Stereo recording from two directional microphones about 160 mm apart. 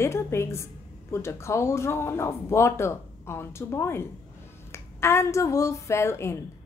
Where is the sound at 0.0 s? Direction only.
15° left (ahead or behind).